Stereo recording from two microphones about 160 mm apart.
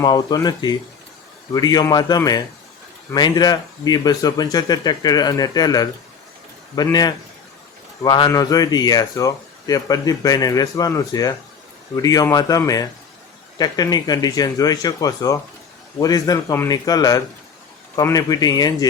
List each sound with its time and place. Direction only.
0.0 s speech: 25° left (ahead or behind)